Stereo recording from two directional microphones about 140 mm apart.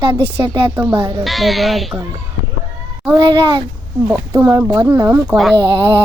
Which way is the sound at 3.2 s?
30° right (ahead or behind).